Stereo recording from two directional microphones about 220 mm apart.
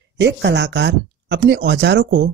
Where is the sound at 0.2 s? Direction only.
50° right (ahead or behind).